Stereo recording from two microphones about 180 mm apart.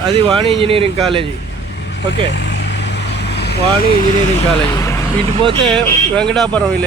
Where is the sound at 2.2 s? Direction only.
75° left (ahead or behind).